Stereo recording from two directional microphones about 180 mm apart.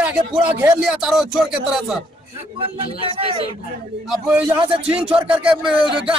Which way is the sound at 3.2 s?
30° right (ahead or behind).